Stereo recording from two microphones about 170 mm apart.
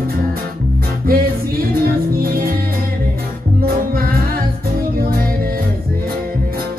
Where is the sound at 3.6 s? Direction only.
60° right (ahead or behind).